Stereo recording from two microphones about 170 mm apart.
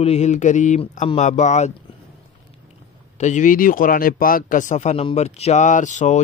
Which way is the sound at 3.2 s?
45° left (ahead or behind).